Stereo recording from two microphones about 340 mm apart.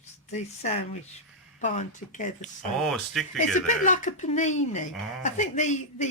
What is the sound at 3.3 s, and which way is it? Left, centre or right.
Speech, left.